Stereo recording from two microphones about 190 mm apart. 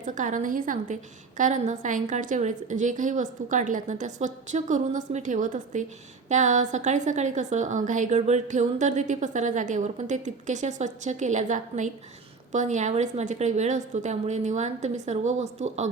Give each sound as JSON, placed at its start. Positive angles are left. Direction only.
{"t": 0.0, "sound": "a woman's voice", "side_deg": -40}